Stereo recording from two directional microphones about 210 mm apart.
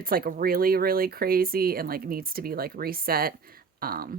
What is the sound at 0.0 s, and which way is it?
Speech, 45° right (ahead or behind).